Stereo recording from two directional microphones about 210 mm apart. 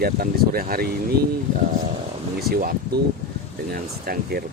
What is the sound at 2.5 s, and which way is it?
Speech, 45° right (ahead or behind).